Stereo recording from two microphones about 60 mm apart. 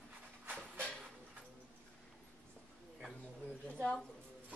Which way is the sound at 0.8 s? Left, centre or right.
Centre.